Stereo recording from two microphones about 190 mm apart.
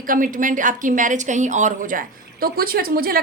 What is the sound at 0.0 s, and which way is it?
Speech, 45° right (ahead or behind).